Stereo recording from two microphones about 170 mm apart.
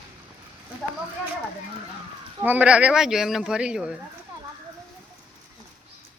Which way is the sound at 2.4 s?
10° right (ahead or behind).